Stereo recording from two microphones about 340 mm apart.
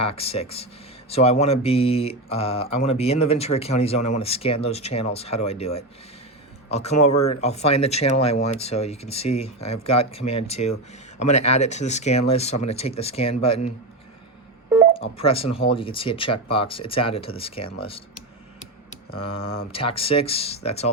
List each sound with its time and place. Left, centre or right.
0.0 s speech: centre
14.9 s speech: centre